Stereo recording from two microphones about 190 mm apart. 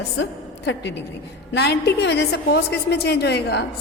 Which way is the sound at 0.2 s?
70° left (ahead or behind).